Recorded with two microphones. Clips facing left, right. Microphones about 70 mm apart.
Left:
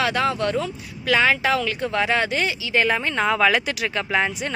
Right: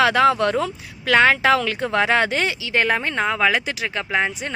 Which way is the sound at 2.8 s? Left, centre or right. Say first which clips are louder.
Right 1 dB; right.